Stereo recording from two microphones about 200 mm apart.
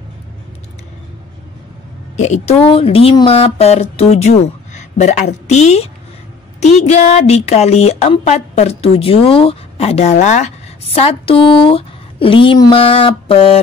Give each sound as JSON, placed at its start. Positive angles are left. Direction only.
{"t": 2.1, "sound": "a woman's voice", "side_deg": 35}